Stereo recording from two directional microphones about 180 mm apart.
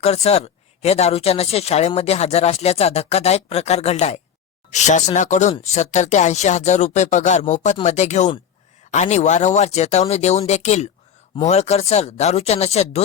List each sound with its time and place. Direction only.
0.0 s speech: 35° left (ahead or behind)